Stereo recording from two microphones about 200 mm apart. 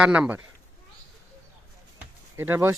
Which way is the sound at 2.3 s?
10° right (ahead or behind).